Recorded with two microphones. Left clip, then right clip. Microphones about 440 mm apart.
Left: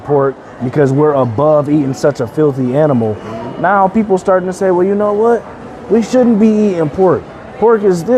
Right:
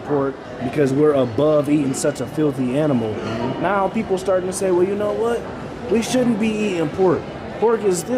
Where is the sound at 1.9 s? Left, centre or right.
Left.